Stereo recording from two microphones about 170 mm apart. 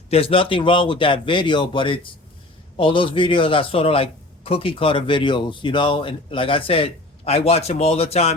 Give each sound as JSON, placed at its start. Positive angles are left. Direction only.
{"t": 0.1, "sound": "a man's voice", "side_deg": 35}